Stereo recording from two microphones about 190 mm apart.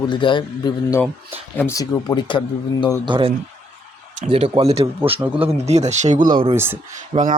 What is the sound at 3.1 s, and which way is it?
Speech, 25° right (ahead or behind).